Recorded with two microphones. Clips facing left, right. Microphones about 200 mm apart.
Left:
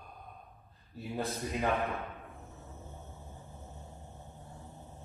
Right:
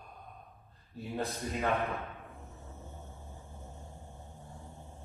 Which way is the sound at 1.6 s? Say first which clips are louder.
Even; centre (ahead or behind).